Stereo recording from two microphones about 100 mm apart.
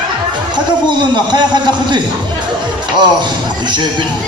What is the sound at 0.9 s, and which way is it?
A man's voice, 50° right (ahead or behind).